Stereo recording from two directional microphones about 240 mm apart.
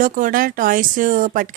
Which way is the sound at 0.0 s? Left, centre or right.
Right.